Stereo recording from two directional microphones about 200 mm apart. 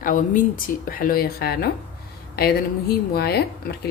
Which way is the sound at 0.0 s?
45° left (ahead or behind).